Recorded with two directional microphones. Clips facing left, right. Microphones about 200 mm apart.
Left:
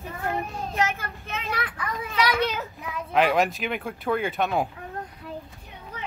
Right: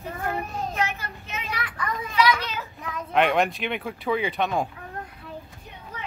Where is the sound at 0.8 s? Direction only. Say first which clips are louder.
Left 3 dB; 50° left (ahead or behind).